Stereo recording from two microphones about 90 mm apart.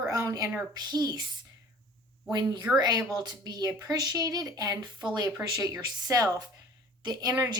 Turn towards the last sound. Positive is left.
turn(degrees=-40)  # may be behind; listen again after turning